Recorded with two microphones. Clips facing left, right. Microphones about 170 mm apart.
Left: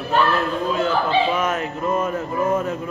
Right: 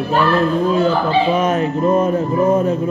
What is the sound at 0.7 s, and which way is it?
A man's voice, 35° right (ahead or behind).